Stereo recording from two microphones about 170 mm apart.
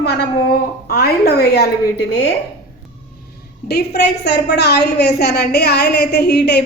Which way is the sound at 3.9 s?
80° left.